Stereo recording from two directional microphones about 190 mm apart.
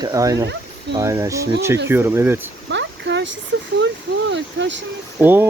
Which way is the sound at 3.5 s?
60° right (ahead or behind).